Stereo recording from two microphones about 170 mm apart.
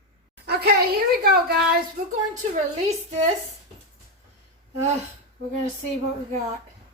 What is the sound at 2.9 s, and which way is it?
Speech, 40° right (ahead or behind).